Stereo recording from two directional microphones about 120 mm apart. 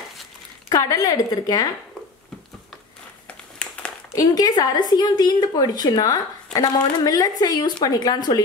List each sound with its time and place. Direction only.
0.7 s a woman's voice: 30° left (ahead or behind)
3.3 s a sound: 10° left (ahead or behind)
4.1 s a woman's voice: 30° left (ahead or behind)